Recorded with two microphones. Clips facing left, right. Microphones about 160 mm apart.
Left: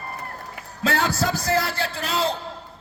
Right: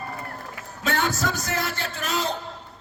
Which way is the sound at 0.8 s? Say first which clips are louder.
Left 2 dB; 35° left (ahead or behind).